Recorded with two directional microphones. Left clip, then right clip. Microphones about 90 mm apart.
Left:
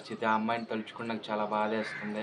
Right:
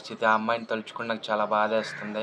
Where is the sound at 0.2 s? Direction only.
30° right (ahead or behind).